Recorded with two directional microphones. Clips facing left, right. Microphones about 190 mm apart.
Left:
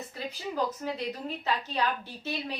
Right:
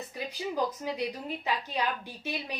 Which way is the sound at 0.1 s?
15° right (ahead or behind).